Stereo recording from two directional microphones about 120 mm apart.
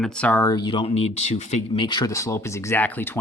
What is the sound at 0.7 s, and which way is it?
Speech, 45° left (ahead or behind).